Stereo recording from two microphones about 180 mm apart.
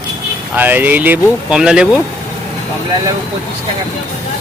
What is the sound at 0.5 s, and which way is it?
Speech, 10° right (ahead or behind).